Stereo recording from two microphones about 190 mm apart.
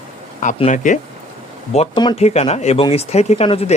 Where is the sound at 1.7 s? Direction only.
30° left (ahead or behind).